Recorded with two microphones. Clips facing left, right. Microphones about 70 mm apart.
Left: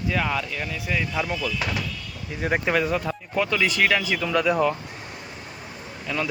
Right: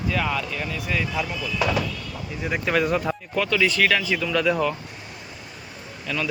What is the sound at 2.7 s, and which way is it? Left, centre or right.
Speech, centre.